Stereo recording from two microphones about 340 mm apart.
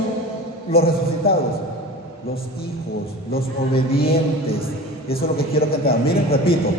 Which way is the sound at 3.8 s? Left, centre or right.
Left.